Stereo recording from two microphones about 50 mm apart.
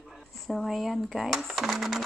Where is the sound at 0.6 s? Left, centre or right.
Centre.